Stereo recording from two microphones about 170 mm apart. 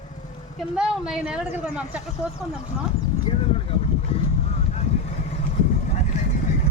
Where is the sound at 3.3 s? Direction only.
30° left (ahead or behind).